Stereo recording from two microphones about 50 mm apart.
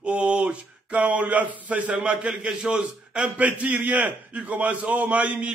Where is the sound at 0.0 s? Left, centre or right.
Right.